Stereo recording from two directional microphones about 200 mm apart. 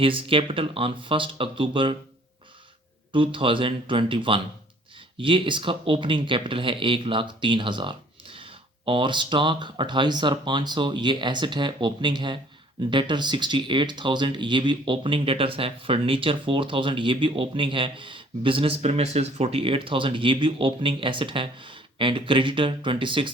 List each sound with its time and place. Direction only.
0.0 s speech: 25° right (ahead or behind)
3.1 s speech: 25° right (ahead or behind)